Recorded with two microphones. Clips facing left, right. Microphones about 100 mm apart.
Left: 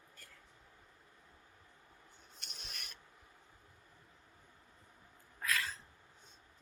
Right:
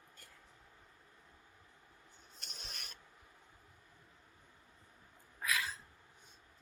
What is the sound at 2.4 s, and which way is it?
Filing, 40° right (ahead or behind).